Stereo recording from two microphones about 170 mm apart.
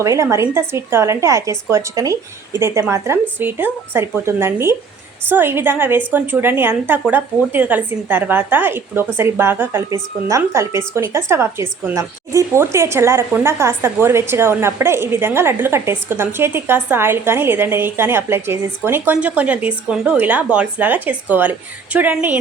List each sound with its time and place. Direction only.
0.0 s a woman's voice: 20° right (ahead or behind)